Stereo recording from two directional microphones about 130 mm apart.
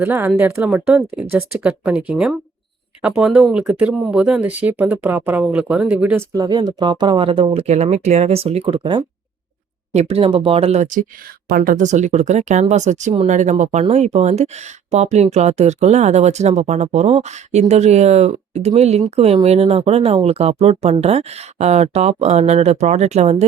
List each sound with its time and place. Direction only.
0.0 s speech: 15° right (ahead or behind)
6.3 s speech: 30° right (ahead or behind)
7.7 s speech: 55° right (ahead or behind); by 9.0 s 40° right (ahead or behind)
9.9 s speech: 55° right (ahead or behind)
11.6 s speech: 80° right; by 23.5 s 55° right (ahead or behind)